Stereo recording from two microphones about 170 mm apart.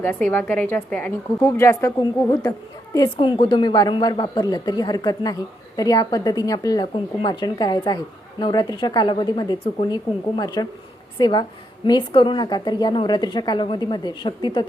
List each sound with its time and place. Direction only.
0.0 s a woman's voice: 10° left (ahead or behind); by 14.7 s 25° left (ahead or behind)